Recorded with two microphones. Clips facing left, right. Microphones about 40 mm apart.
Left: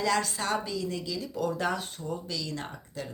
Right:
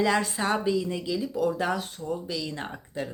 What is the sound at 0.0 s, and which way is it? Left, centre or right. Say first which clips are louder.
Speech: right 3 dB; right.